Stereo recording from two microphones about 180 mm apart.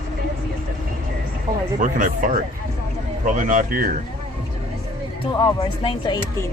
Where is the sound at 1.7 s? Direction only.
45° right (ahead or behind).